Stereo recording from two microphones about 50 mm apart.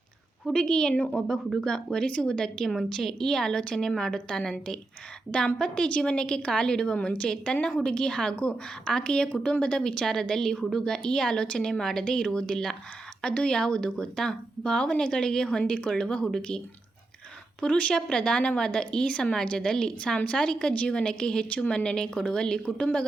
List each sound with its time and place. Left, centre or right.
0.5 s a woman's voice: centre
5.7 s a woman's voice: left
17.6 s a woman's voice: left